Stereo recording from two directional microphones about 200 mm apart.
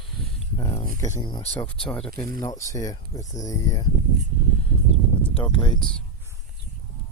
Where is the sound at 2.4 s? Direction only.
15° left (ahead or behind).